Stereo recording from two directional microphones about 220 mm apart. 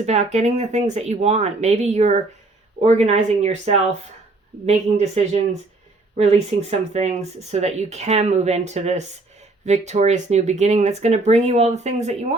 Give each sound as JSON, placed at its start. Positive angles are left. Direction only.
{"t": 0.0, "sound": "speech", "side_deg": -30}